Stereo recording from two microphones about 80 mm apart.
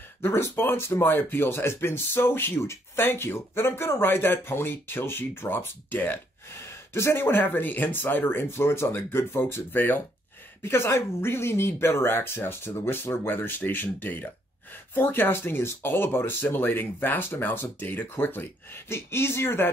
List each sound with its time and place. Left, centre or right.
0.2 s speech: left